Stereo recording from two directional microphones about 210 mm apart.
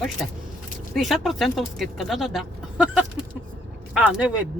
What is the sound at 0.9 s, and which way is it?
Speech, centre (ahead or behind).